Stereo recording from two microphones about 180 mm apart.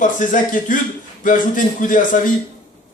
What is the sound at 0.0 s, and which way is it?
Speech, 45° left (ahead or behind).